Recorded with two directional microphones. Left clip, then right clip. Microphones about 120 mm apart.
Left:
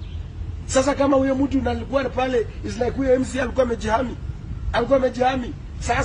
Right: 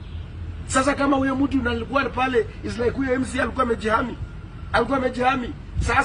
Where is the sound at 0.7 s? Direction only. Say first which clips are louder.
Left 2 dB; 40° left (ahead or behind).